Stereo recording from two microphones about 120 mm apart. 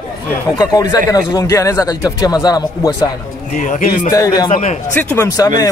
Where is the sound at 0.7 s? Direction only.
30° left (ahead or behind).